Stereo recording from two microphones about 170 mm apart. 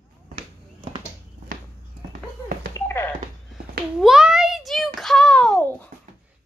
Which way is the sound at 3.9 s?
5° right (ahead or behind).